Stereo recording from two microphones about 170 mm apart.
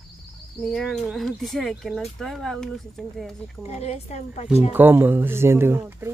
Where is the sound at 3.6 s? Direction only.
40° left (ahead or behind).